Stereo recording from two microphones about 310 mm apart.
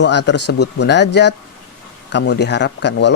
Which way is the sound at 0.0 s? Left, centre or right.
Left.